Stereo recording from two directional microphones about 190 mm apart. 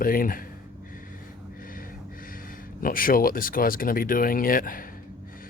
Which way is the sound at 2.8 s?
50° left (ahead or behind).